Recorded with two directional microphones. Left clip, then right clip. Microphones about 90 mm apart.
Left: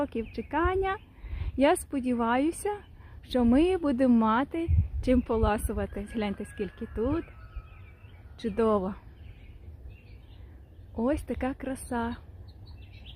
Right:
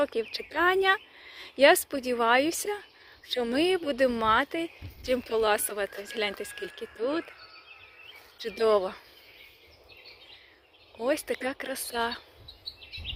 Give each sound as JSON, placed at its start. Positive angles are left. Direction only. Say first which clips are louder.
{"t": 0.0, "sound": "speech", "louder": "right 4 dB", "side_deg": 5}
{"t": 3.2, "sound": "a woman's voice", "louder": "left 2 dB", "side_deg": 40}
{"t": 8.4, "sound": "speech", "louder": "right 2 dB", "side_deg": 30}
{"t": 11.0, "sound": "speech", "louder": "right 1 dB", "side_deg": 15}
{"t": 11.9, "sound": "speech", "louder": "right 4 dB", "side_deg": 0}